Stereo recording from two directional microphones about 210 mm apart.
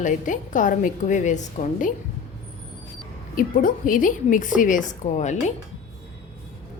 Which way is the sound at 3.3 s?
40° left (ahead or behind).